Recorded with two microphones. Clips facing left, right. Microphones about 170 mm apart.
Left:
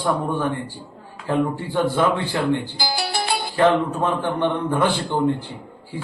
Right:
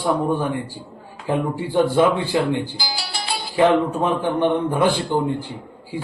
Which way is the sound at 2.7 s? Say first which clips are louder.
Left 5 dB; 50° left (ahead or behind).